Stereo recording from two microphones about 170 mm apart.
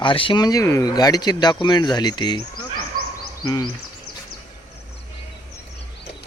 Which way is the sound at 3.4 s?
25° left (ahead or behind).